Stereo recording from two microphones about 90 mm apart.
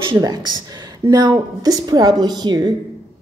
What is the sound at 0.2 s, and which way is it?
A woman's voice, 55° right (ahead or behind).